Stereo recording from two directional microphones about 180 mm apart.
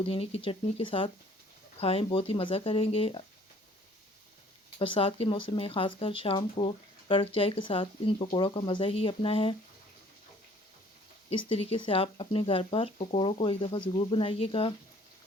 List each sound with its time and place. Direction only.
0.0 s speech: 30° left (ahead or behind)
4.8 s speech: 30° left (ahead or behind)
11.3 s speech: 30° left (ahead or behind)